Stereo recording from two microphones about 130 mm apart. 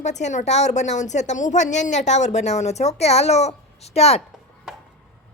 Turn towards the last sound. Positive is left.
turn(degrees=55)  # may be behind; listen again after turning